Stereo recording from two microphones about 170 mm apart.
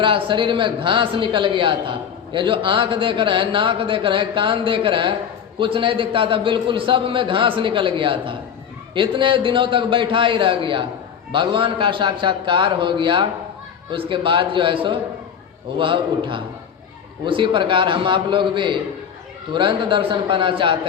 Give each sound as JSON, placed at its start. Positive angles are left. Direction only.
{"t": 0.0, "sound": "a man's voice", "side_deg": -30}